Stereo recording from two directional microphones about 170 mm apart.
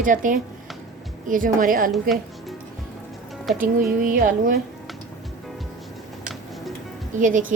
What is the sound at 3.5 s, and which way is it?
A woman's voice, 50° right (ahead or behind).